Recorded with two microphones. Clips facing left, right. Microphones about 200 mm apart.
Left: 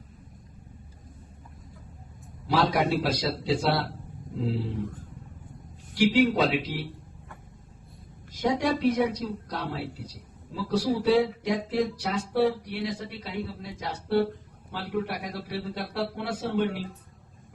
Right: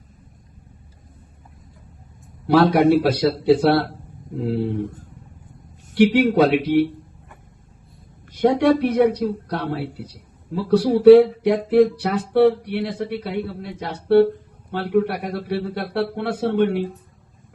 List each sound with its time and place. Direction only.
2.5 s speech: 60° right (ahead or behind)
5.9 s speech: 65° right (ahead or behind)
8.3 s speech: 65° right (ahead or behind)